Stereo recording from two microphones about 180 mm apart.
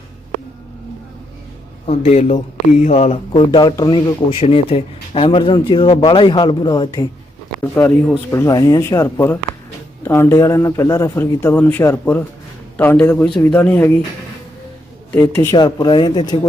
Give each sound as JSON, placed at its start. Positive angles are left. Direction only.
{"t": 1.9, "sound": "a man's voice", "side_deg": 40}
{"t": 7.8, "sound": "a man's voice", "side_deg": 10}
{"t": 15.4, "sound": "a man's voice", "side_deg": 20}